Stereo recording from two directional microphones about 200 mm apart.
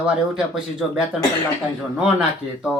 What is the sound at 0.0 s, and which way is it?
Speech, 5° right (ahead or behind).